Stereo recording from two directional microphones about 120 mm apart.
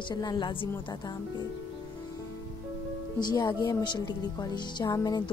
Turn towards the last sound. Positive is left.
turn(degrees=30)  # may be behind; listen again after turning